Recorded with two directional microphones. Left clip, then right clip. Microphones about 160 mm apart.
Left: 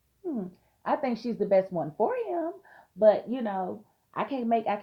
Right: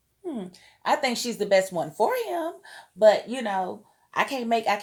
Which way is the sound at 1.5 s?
30° right (ahead or behind).